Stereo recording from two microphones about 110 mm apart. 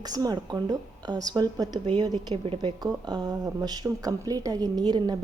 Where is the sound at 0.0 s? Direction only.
35° right (ahead or behind).